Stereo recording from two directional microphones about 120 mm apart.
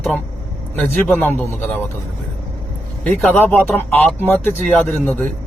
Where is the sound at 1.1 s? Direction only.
15° left (ahead or behind).